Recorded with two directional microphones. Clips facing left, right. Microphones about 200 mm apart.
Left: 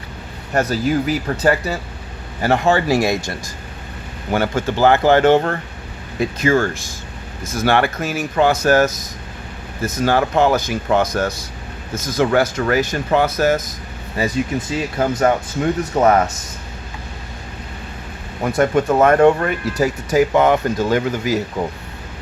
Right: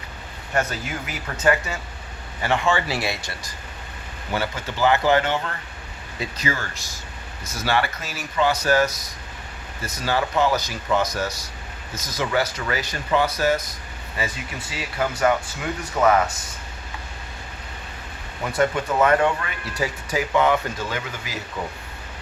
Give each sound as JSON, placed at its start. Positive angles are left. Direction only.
{"t": 0.5, "sound": "speech", "side_deg": 35}
{"t": 14.8, "sound": "speech", "side_deg": 40}
{"t": 18.4, "sound": "speech", "side_deg": 45}